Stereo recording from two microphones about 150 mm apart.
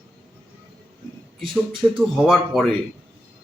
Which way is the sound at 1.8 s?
20° right (ahead or behind).